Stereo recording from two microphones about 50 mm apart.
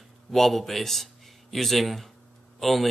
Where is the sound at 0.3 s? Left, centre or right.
Centre.